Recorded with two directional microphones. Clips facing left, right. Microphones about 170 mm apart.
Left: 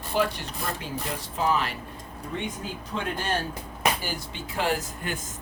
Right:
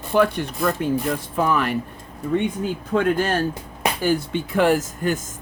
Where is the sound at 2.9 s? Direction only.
50° right (ahead or behind).